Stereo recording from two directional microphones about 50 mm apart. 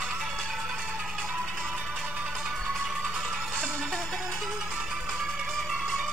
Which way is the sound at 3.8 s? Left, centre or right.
Centre.